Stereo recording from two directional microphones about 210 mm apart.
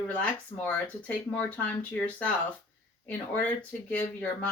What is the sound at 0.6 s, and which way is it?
Speech, 5° left (ahead or behind).